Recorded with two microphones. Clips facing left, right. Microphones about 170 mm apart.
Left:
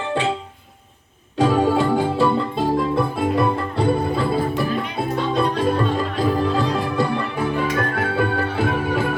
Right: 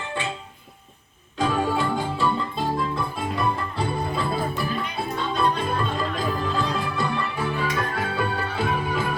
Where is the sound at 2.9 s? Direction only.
65° left (ahead or behind).